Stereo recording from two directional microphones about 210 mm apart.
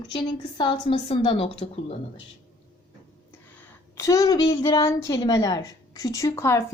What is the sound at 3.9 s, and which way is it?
A woman's voice, 15° left (ahead or behind).